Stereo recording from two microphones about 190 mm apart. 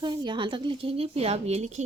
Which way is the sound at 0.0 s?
25° right (ahead or behind).